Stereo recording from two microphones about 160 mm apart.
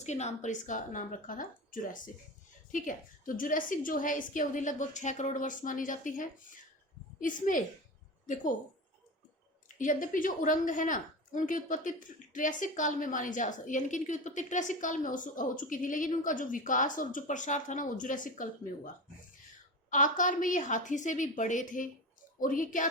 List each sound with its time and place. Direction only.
0.0 s a woman's voice: 45° left (ahead or behind)
9.6 s a woman's voice: 55° left (ahead or behind)
19.9 s a woman's voice: 55° left (ahead or behind)